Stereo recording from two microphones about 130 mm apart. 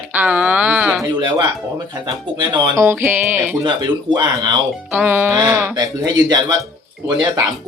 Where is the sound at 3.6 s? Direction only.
35° right (ahead or behind).